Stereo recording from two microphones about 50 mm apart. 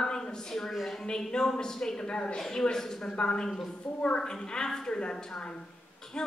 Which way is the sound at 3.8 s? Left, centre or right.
Left.